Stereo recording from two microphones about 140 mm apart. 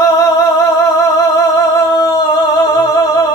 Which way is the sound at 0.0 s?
30° left (ahead or behind).